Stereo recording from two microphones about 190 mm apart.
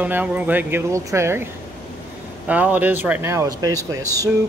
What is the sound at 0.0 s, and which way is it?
Speech, 10° right (ahead or behind).